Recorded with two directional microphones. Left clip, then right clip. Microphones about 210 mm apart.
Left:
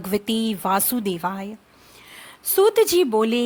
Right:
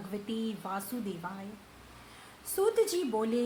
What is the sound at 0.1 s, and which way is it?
A woman's voice, 45° left (ahead or behind).